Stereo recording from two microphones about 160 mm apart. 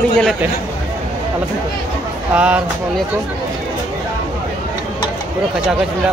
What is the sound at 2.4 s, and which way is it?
Speech, 5° right (ahead or behind).